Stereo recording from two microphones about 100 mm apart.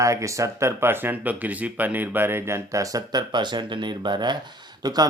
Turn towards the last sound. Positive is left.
turn(degrees=-40)  # may be behind; listen again after turning